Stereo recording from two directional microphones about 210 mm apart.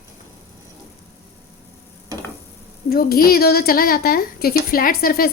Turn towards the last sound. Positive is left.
turn(degrees=45)  # may be behind; listen again after turning